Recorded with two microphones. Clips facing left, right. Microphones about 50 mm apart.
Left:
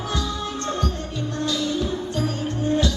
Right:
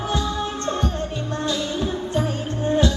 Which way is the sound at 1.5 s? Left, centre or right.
Right.